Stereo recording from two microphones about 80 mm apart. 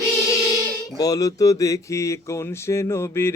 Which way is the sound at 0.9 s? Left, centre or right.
Left.